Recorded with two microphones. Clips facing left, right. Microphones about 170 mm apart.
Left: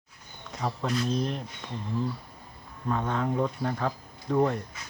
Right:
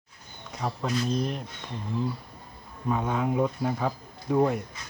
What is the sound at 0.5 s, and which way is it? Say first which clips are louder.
Speech: even; centre (ahead or behind).